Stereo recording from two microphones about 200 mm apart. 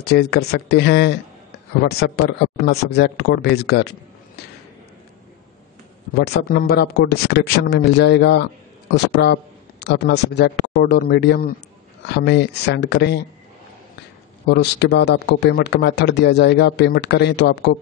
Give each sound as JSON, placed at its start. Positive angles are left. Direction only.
{"t": 0.0, "sound": "a man's voice", "side_deg": 55}
{"t": 6.1, "sound": "a man's voice", "side_deg": 55}
{"t": 14.5, "sound": "a man's voice", "side_deg": 55}